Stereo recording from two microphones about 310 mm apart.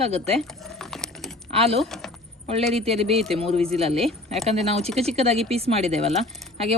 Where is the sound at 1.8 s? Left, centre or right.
Centre.